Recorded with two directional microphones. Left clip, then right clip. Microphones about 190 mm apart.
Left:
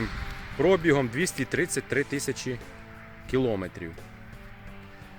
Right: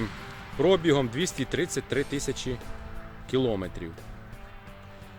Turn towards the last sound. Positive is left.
turn(degrees=0)  # may be behind; listen again after turning